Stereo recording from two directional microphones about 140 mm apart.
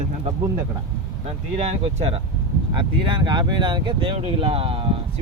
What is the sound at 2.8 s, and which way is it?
Speech, 35° right (ahead or behind).